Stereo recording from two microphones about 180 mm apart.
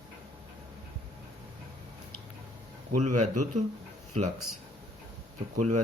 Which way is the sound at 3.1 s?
45° right (ahead or behind).